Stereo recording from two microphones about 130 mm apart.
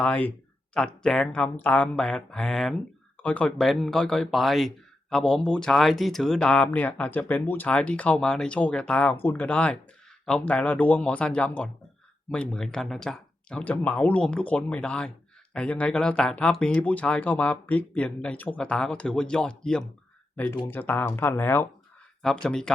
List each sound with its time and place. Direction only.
0.0 s speech: 10° left (ahead or behind)
22.2 s speech: 5° left (ahead or behind)